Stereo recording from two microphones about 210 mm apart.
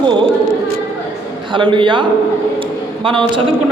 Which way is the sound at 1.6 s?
25° right (ahead or behind).